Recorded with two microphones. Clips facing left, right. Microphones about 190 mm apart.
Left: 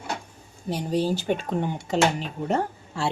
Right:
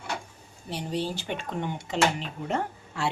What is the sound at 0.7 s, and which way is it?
Speech, 40° left (ahead or behind).